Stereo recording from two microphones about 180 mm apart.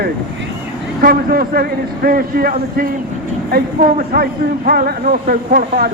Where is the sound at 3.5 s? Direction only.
55° right (ahead or behind).